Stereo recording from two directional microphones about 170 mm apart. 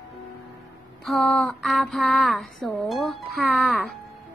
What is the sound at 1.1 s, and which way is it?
Speech, 5° left (ahead or behind).